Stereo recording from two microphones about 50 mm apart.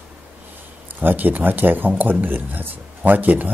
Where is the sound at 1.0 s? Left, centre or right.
Right.